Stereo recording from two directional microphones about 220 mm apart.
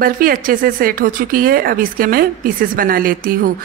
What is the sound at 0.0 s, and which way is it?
Speech, 40° right (ahead or behind).